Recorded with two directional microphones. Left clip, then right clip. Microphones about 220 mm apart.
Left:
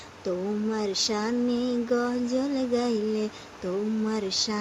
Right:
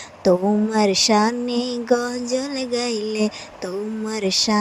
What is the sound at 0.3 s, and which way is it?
Female singing, 35° right (ahead or behind).